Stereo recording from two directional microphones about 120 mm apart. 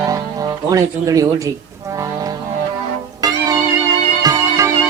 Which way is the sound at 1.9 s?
30° right (ahead or behind).